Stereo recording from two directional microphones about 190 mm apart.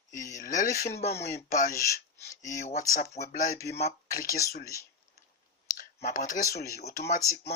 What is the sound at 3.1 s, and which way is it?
Speech, 55° left (ahead or behind).